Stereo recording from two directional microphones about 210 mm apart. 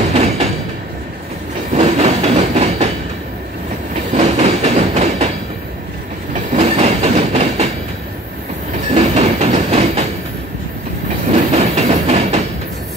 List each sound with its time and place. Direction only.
0.1 s train: 30° right (ahead or behind)
1.7 s train: 30° right (ahead or behind)
4.1 s train: 30° right (ahead or behind)
6.5 s train: 30° right (ahead or behind)
8.9 s train: 30° right (ahead or behind)
11.2 s train: 35° right (ahead or behind)